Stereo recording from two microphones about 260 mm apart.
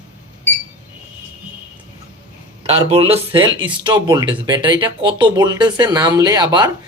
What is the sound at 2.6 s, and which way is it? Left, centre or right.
Speech, right.